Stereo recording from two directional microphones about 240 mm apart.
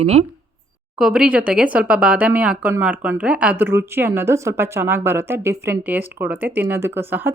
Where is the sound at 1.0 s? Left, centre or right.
Centre.